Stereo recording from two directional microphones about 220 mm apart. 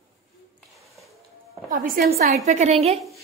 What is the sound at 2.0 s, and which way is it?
Speech, 40° right (ahead or behind).